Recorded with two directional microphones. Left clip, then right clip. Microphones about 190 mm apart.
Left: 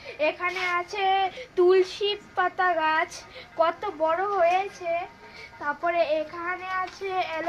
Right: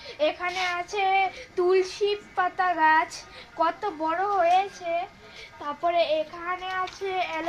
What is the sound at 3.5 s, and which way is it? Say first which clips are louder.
Speech: left 1 dB; 35° left (ahead or behind).